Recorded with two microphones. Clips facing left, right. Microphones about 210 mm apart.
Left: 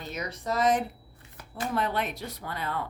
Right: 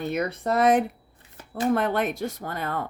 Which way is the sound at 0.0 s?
55° right (ahead or behind).